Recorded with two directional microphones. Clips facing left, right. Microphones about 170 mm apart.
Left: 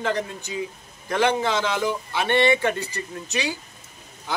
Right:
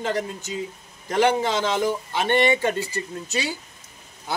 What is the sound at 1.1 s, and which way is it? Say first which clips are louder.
A man's voice: right 1 dB; 15° right (ahead or behind).